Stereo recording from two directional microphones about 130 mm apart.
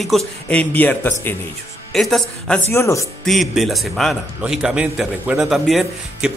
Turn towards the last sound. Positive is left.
turn(degrees=0)  # may be behind; listen again after turning